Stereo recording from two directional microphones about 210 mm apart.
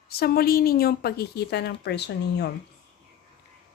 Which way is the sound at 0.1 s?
45° left (ahead or behind).